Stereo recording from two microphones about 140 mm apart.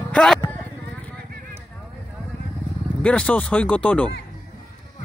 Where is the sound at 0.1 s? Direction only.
5° left (ahead or behind).